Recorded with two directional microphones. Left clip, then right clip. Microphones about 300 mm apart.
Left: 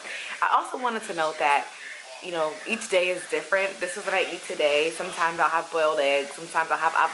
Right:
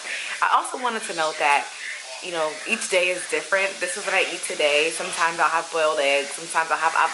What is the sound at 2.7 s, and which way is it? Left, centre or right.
Speech, centre.